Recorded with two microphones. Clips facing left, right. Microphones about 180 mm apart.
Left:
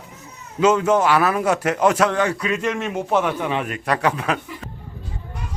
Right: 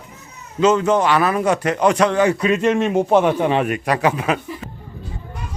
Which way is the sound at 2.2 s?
20° right (ahead or behind).